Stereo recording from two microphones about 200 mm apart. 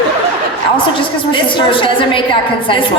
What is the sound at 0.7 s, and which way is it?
A woman's voice, 25° left (ahead or behind).